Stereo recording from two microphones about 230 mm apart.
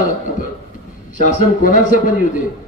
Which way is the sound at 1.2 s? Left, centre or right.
Left.